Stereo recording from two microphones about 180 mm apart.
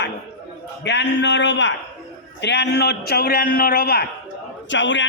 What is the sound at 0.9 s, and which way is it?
Speech, 70° left (ahead or behind).